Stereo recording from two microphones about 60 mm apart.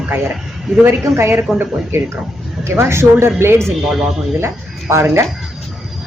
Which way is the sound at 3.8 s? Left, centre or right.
Centre.